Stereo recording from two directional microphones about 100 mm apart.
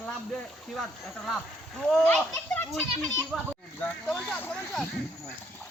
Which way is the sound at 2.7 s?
Centre (ahead or behind).